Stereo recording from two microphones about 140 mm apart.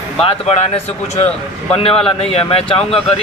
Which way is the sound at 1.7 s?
45° left (ahead or behind).